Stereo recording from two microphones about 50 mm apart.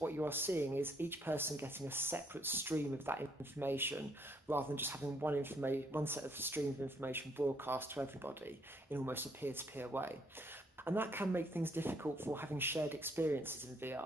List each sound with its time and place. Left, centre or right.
0.0 s speech: right